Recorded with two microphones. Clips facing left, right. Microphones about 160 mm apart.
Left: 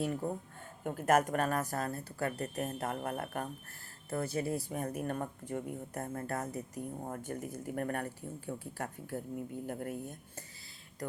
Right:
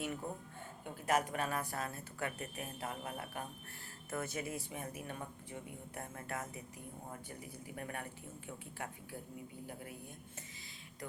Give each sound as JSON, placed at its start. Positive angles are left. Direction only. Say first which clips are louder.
{"t": 0.9, "sound": "speech", "louder": "left 6 dB", "side_deg": 50}
{"t": 2.8, "sound": "speech", "louder": "left 7 dB", "side_deg": 55}
{"t": 4.1, "sound": "speech", "louder": "left 6 dB", "side_deg": 35}